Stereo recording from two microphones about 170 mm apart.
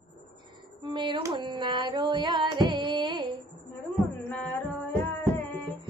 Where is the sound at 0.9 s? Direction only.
25° right (ahead or behind).